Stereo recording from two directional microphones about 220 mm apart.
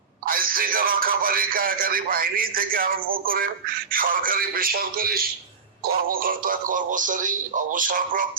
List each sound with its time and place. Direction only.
0.3 s a man's voice: 40° right (ahead or behind)